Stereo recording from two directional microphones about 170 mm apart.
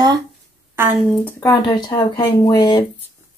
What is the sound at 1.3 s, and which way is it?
Speech, 20° left (ahead or behind).